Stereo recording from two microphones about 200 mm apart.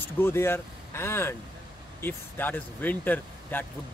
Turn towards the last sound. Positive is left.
turn(degrees=10)  # may be behind; listen again after turning